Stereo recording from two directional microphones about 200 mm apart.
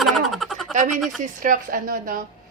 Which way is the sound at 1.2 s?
40° right (ahead or behind).